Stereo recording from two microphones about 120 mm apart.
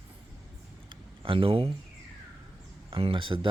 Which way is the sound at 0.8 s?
45° right (ahead or behind).